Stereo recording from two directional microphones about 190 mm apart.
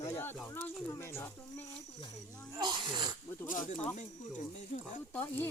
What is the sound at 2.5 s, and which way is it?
Speech, 20° right (ahead or behind).